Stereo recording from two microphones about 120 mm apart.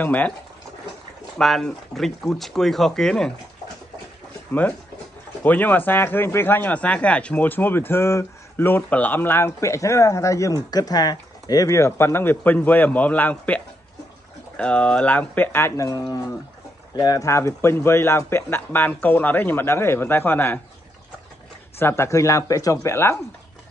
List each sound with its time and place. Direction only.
0.0 s speech: 15° left (ahead or behind)
1.4 s speech: centre (ahead or behind)
4.5 s speech: 15° left (ahead or behind)
14.6 s a man's voice: 10° left (ahead or behind)
21.7 s a man's voice: 20° left (ahead or behind)